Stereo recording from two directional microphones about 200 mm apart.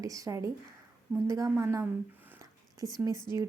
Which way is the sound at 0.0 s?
15° right (ahead or behind).